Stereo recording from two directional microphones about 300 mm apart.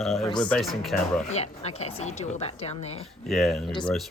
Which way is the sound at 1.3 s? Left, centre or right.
Left.